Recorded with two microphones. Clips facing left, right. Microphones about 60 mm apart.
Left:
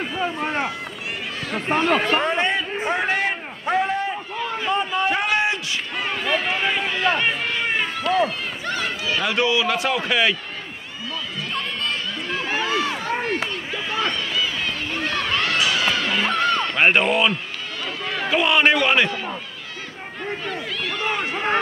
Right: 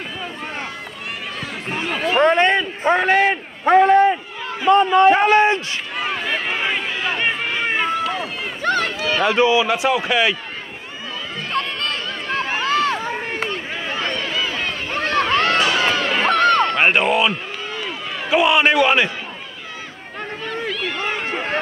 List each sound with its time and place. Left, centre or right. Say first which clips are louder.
1.8 s a man's voice: left 2 dB; centre
2.2 s a man's voice: right 6 dB; right
5.1 s a man's voice: right 7 dB; right
5.9 s run: even; centre
8.6 s speech: right 7 dB; right
9.2 s speech: right 5 dB; right; by 10.3 s centre
11.5 s run: right 4 dB; right
13.8 s run: even; right
16.2 s a sound: right 9 dB; right
16.7 s a man's voice: right 1 dB; centre
20.4 s run: right 3 dB; centre